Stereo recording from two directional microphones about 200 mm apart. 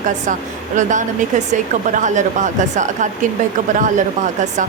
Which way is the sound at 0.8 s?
40° right (ahead or behind).